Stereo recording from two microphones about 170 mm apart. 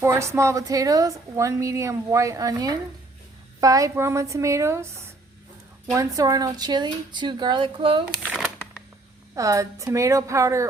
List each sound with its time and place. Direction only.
0.0 s a woman's voice: 15° right (ahead or behind)
5.9 s a woman's voice: 20° right (ahead or behind)
9.3 s a woman's voice: 20° right (ahead or behind)